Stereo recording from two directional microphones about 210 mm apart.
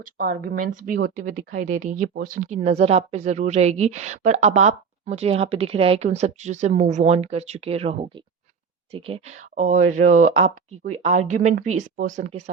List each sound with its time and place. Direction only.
0.0 s speech: 40° right (ahead or behind)